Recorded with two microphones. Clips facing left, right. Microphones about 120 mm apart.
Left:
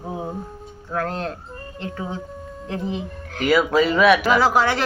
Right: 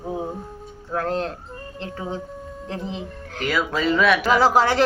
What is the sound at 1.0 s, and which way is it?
Speech, 25° right (ahead or behind).